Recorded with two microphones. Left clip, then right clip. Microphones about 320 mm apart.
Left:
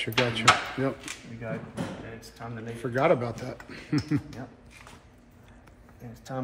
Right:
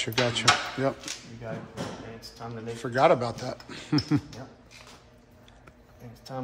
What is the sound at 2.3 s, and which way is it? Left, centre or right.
Speech, centre.